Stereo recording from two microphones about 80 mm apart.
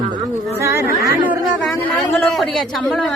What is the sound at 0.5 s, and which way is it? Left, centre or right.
Speech, right.